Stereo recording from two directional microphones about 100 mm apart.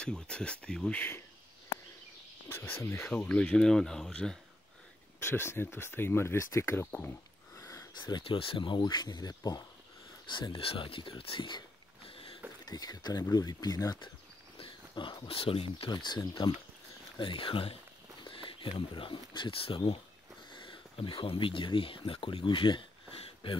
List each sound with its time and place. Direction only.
0.0 s speech: 10° left (ahead or behind)
2.8 s speech: 25° left (ahead or behind)
3.1 s speech: 10° left (ahead or behind)
5.2 s speech: 25° left (ahead or behind)
7.5 s a sound: 35° left (ahead or behind)
8.2 s speech: 65° left (ahead or behind); by 9.7 s 40° left (ahead or behind)
10.3 s speech: 55° left (ahead or behind)
12.6 s speech: 40° left (ahead or behind)
14.6 s speech: 55° left (ahead or behind)
15.9 s speech: 45° left (ahead or behind)